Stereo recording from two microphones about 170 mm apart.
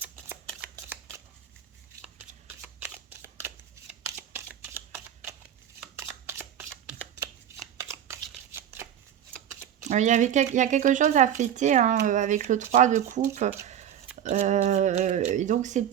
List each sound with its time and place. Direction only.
2.6 s shuffling cards: 10° right (ahead or behind)
9.8 s speech: 45° right (ahead or behind)
13.7 s a sound: 40° right (ahead or behind)
14.2 s speech: 45° right (ahead or behind)